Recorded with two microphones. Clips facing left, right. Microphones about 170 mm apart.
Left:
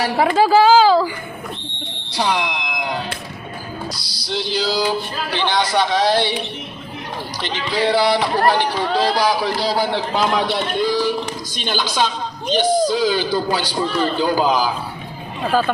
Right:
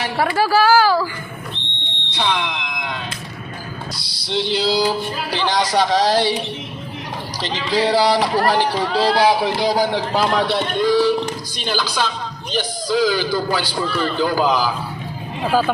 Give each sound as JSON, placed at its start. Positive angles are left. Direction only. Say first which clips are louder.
{"t": 0.2, "sound": "speech", "louder": "left 3 dB", "side_deg": 20}
{"t": 2.0, "sound": "a sound", "louder": "left 1 dB", "side_deg": 40}
{"t": 3.9, "sound": "a sound", "louder": "right 2 dB", "side_deg": -25}
{"t": 5.3, "sound": "speech", "louder": "even", "side_deg": -35}
{"t": 7.4, "sound": "a man's voice", "louder": "right 1 dB", "side_deg": -35}
{"t": 10.3, "sound": "a man's voice", "louder": "right 1 dB", "side_deg": 0}
{"t": 10.8, "sound": "speech", "louder": "right 7 dB", "side_deg": 15}
{"t": 15.5, "sound": "a man's voice", "louder": "even", "side_deg": -10}